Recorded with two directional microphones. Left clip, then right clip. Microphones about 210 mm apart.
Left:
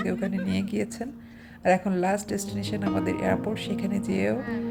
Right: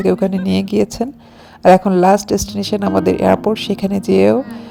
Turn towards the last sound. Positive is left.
turn(degrees=-30)  # may be behind; listen again after turning